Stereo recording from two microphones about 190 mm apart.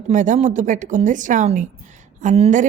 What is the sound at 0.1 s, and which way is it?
A woman's voice, 40° right (ahead or behind).